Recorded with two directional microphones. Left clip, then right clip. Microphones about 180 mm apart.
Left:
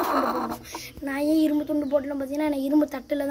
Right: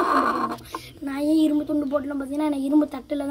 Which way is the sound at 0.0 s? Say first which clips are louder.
Right 3 dB; centre (ahead or behind).